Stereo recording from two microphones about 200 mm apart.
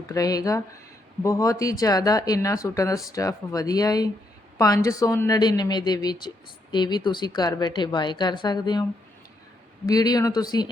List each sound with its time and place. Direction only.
0.1 s a woman's voice: 15° left (ahead or behind)